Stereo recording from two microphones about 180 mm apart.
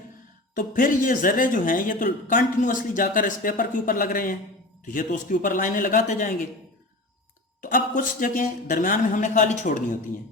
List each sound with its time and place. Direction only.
0.5 s speech: 50° left (ahead or behind)
7.6 s speech: 50° left (ahead or behind)